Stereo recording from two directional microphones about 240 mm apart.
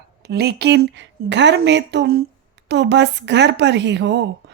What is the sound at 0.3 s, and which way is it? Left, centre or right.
A woman's voice, right.